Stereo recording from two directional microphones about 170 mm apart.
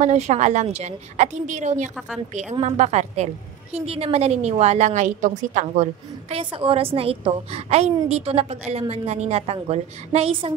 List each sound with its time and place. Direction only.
0.0 s a woman's voice: 40° right (ahead or behind)